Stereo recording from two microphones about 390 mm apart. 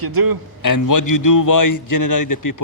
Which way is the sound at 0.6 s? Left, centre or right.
Left.